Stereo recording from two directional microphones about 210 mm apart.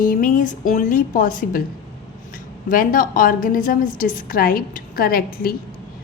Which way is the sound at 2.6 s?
40° left (ahead or behind).